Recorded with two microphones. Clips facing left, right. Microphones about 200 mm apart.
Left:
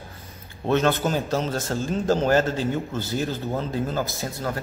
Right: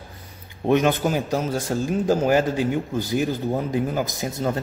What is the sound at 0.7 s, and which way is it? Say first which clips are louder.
A man's voice: right 2 dB; 15° right (ahead or behind).